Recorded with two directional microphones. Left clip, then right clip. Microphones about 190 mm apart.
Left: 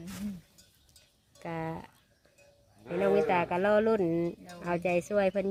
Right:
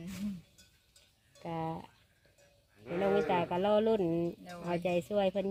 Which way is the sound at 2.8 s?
65° left (ahead or behind).